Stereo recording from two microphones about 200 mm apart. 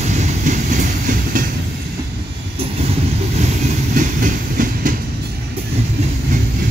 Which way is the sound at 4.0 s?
40° right (ahead or behind).